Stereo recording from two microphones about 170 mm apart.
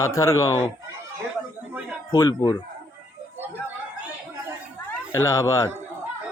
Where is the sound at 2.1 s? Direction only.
20° left (ahead or behind).